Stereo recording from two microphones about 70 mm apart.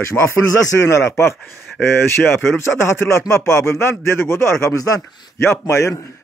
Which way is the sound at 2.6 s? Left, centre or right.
Left.